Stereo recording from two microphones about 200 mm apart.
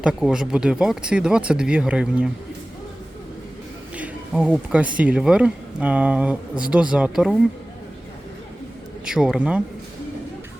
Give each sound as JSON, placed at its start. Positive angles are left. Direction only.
{"t": 0.0, "sound": "speech", "side_deg": -5}
{"t": 3.9, "sound": "speech", "side_deg": -5}
{"t": 9.0, "sound": "speech", "side_deg": -5}